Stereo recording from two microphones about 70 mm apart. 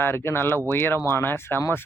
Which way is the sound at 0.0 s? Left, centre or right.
Left.